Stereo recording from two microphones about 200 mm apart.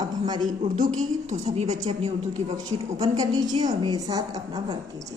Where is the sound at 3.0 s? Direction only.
20° right (ahead or behind).